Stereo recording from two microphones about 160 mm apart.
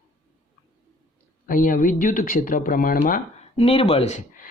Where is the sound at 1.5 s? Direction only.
60° left (ahead or behind).